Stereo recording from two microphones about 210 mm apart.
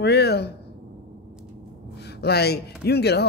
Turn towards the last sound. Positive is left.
turn(degrees=50)  # may be behind; listen again after turning